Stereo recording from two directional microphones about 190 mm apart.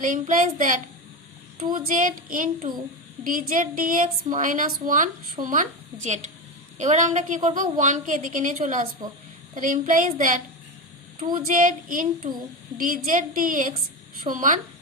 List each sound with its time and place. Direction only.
0.0 s a woman's voice: 45° right (ahead or behind)
11.2 s speech: 25° right (ahead or behind)
11.4 s a woman's voice: 45° right (ahead or behind)